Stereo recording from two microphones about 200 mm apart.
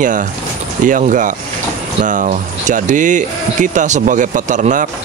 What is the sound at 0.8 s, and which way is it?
Speech, 40° right (ahead or behind).